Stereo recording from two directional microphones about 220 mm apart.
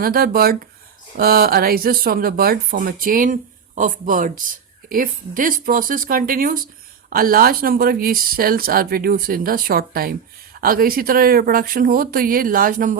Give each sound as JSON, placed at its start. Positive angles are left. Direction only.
{"t": 0.0, "sound": "speech", "side_deg": -40}